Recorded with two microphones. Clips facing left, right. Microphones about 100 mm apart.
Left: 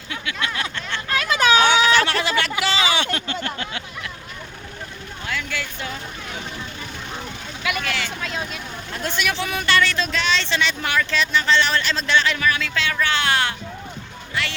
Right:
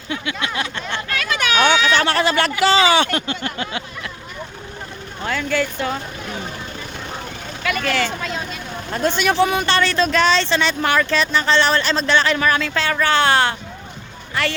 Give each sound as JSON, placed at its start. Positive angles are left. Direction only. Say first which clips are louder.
{"t": 0.1, "sound": "a sound", "louder": "right 3 dB", "side_deg": -25}
{"t": 1.6, "sound": "speech", "louder": "right 1 dB", "side_deg": -35}
{"t": 3.4, "sound": "a sound", "louder": "right 3 dB", "side_deg": -20}
{"t": 5.2, "sound": "speech", "louder": "right 8 dB", "side_deg": -40}
{"t": 7.8, "sound": "speech", "louder": "right 6 dB", "side_deg": -45}
{"t": 9.0, "sound": "speech", "louder": "right 8 dB", "side_deg": -30}
{"t": 14.4, "sound": "speech", "louder": "right 5 dB", "side_deg": -45}